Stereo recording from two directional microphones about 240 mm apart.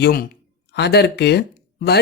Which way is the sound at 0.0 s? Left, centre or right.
Left.